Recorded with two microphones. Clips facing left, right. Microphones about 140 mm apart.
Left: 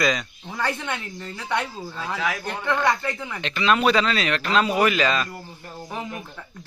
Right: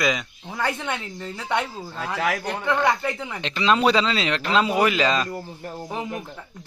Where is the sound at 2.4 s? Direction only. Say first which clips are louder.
Right 1 dB; 10° right (ahead or behind).